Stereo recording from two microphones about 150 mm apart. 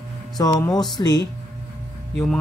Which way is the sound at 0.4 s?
25° left (ahead or behind).